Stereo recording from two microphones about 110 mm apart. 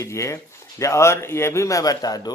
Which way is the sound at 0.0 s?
25° left (ahead or behind).